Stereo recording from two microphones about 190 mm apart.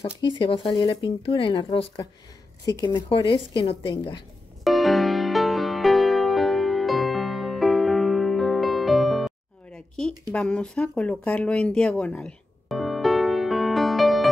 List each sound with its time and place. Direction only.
0.3 s speech: 25° left (ahead or behind)
4.6 s music: centre (ahead or behind)
10.3 s a sound: 5° left (ahead or behind)